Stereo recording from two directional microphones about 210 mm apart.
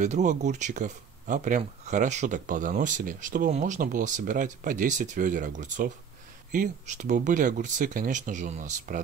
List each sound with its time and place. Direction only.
0.0 s speech: 35° right (ahead or behind)